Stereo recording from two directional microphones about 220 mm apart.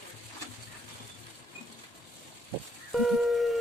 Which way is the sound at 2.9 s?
Centre (ahead or behind).